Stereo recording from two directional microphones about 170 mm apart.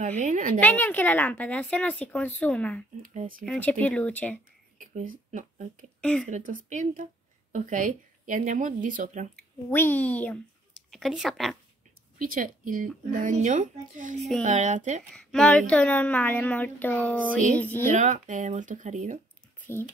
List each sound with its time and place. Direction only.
0.0 s speech: 45° right (ahead or behind)
0.6 s speech: 10° left (ahead or behind)
3.0 s speech: 55° right (ahead or behind)
3.4 s speech: 10° left (ahead or behind)
4.7 s speech: 50° right (ahead or behind)
5.9 s a woman's voice: 5° left (ahead or behind)
6.2 s speech: 50° right (ahead or behind)
9.7 s speech: 10° left (ahead or behind)
12.2 s speech: 55° right (ahead or behind)
15.1 s speech: 5° left (ahead or behind)
17.9 s speech: 45° right (ahead or behind)
19.6 s speech: 15° left (ahead or behind)